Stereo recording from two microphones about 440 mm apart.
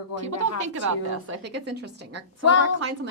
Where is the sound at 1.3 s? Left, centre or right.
Right.